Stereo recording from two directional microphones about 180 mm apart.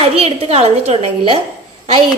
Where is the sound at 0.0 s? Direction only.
35° right (ahead or behind).